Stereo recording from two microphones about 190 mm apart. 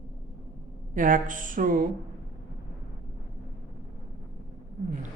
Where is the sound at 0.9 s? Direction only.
45° right (ahead or behind).